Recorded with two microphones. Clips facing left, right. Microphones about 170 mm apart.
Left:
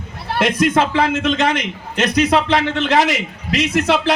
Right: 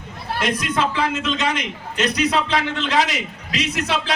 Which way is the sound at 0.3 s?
55° left (ahead or behind).